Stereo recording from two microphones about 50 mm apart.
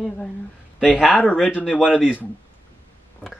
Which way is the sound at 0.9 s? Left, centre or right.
Centre.